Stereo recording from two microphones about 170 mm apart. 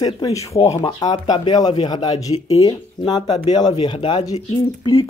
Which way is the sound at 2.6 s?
25° left (ahead or behind).